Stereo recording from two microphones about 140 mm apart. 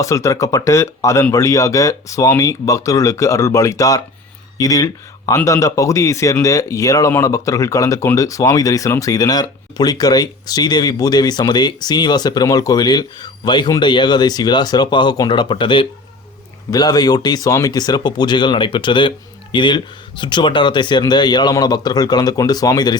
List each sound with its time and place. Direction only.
0.0 s speech: 20° left (ahead or behind)